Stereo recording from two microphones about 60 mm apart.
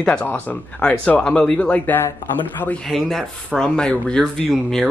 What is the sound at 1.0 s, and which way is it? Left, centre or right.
Speech, centre.